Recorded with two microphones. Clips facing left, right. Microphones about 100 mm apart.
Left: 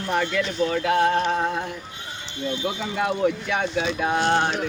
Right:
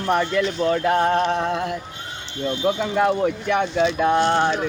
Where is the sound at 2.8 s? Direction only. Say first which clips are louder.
Right 3 dB; 55° right (ahead or behind).